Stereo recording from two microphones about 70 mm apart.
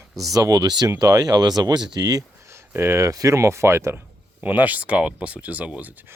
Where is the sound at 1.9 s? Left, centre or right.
Right.